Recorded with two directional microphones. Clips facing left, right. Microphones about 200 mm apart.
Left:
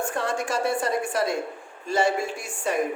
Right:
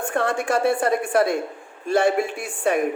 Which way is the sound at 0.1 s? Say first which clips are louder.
Right 5 dB; 55° right (ahead or behind).